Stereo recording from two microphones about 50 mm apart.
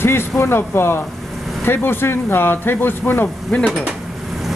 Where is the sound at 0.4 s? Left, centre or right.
Left.